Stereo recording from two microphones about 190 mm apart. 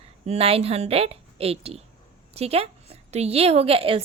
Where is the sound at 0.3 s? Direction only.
30° right (ahead or behind).